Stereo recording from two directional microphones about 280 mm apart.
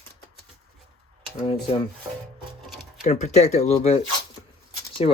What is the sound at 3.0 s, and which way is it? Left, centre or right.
Speech, left.